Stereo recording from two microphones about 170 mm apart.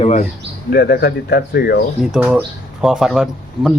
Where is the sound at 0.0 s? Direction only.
45° left (ahead or behind).